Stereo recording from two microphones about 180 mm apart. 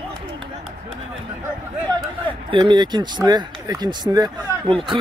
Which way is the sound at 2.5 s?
25° right (ahead or behind).